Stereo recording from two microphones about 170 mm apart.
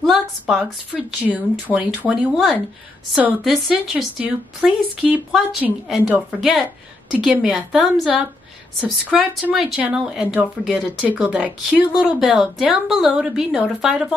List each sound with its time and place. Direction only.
0.0 s a woman's voice: centre (ahead or behind)
8.8 s a woman's voice: centre (ahead or behind)